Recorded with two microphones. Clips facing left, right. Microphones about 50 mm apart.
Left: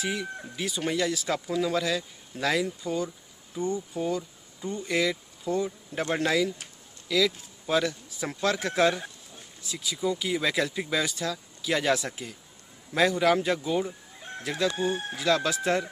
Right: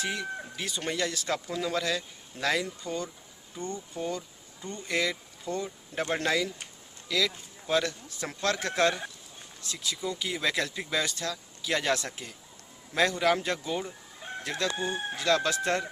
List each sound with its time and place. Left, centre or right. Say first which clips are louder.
0.0 s speech: left 1 dB; centre